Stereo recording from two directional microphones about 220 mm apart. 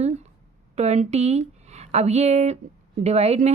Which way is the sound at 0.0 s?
30° right (ahead or behind).